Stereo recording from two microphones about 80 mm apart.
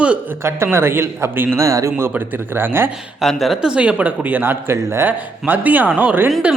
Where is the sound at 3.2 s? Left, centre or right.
Centre; by 6.3 s right.